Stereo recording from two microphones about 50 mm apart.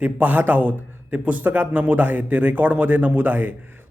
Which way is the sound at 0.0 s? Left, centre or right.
Right.